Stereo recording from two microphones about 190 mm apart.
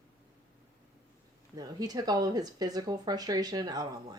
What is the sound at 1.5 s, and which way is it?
Speech, 20° right (ahead or behind).